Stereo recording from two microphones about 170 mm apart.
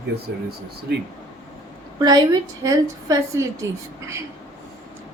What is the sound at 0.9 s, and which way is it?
Speech, 70° right (ahead or behind).